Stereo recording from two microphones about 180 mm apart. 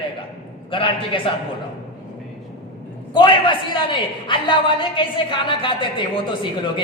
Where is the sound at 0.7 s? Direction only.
30° left (ahead or behind).